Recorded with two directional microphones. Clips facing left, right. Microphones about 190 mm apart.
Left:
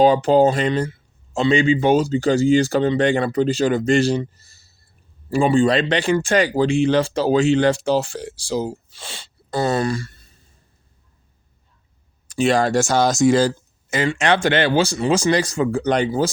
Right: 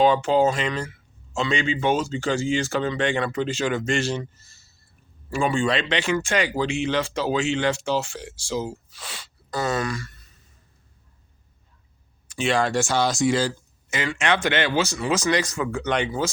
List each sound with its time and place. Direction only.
0.0 s speech: 40° left (ahead or behind)
12.3 s speech: 40° left (ahead or behind)
14.1 s speech: 30° left (ahead or behind)